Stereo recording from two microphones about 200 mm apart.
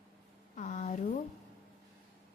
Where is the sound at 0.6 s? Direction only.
35° left (ahead or behind).